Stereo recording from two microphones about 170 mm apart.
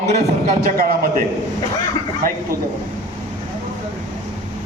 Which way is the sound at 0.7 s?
60° right (ahead or behind).